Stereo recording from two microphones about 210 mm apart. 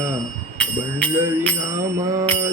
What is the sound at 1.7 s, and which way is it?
Mantra, 15° right (ahead or behind).